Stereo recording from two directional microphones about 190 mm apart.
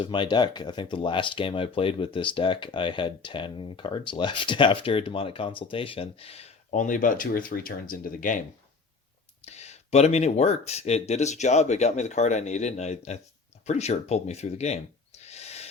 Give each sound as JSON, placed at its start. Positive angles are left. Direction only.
{"t": 0.0, "sound": "speech", "side_deg": 25}
{"t": 9.5, "sound": "speech", "side_deg": 35}